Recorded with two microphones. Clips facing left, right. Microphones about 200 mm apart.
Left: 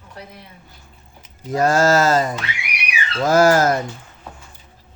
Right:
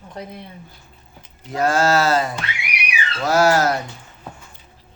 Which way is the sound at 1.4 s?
40° left (ahead or behind).